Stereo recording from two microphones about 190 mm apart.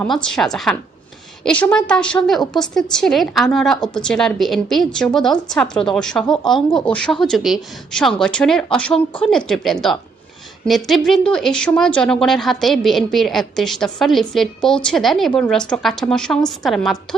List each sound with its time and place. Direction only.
0.1 s a woman's voice: 5° left (ahead or behind)